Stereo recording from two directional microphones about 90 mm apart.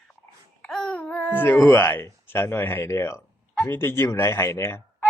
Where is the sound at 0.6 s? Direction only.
5° left (ahead or behind); by 5.0 s 25° left (ahead or behind).